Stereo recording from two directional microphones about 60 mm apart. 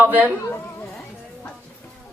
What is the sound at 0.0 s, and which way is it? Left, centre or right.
Speech, right.